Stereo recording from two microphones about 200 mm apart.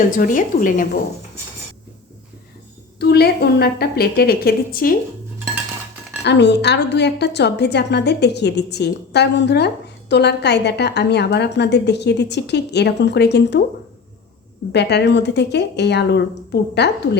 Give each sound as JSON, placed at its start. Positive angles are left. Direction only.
{"t": 0.1, "sound": "a woman's voice", "side_deg": 45}
{"t": 3.0, "sound": "a woman's voice", "side_deg": 55}
{"t": 6.2, "sound": "a woman's voice", "side_deg": 60}
{"t": 14.7, "sound": "a woman's voice", "side_deg": 55}